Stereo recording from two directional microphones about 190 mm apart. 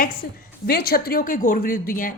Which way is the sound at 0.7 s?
55° left (ahead or behind).